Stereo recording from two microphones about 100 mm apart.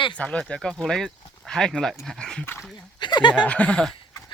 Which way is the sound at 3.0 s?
50° left (ahead or behind).